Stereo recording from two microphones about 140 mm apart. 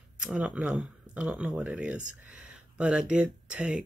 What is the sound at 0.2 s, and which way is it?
Speech, 5° right (ahead or behind).